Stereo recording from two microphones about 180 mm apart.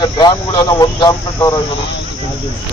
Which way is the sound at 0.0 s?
25° left (ahead or behind).